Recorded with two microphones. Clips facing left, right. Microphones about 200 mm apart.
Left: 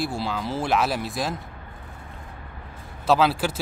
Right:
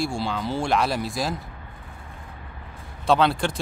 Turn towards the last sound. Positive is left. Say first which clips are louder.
# even
turn(degrees=5)  # may be behind; listen again after turning